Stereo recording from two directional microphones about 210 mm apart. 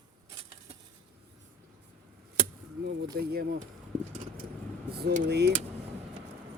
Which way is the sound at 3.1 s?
50° right (ahead or behind).